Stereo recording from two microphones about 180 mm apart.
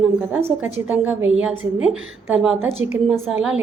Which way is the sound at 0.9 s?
5° right (ahead or behind).